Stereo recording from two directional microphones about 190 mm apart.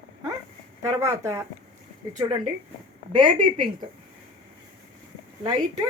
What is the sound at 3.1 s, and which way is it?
Speech, 25° right (ahead or behind).